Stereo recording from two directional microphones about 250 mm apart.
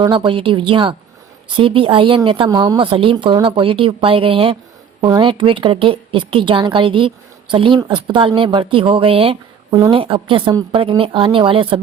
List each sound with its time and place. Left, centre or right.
0.0 s speech: centre